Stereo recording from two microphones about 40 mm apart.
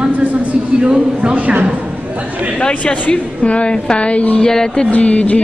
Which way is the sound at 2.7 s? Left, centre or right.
Left.